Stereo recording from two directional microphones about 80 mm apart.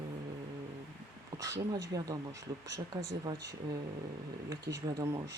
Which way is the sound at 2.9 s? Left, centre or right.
Right.